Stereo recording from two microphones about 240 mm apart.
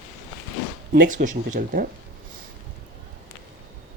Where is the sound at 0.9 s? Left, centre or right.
Right.